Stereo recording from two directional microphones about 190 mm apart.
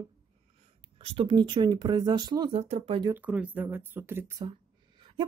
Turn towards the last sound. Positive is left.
turn(degrees=-15)  # may be behind; listen again after turning